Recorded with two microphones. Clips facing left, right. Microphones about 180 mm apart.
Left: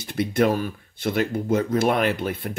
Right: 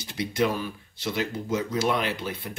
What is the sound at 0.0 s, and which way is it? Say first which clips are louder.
Speech: left 5 dB; 55° left (ahead or behind).